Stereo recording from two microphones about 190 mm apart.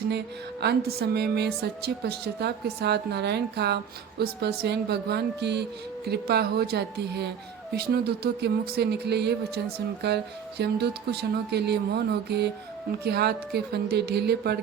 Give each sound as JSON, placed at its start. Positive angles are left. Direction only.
{"t": 0.6, "sound": "speech", "side_deg": -55}